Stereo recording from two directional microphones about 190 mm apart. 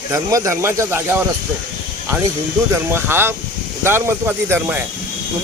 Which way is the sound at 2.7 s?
10° right (ahead or behind).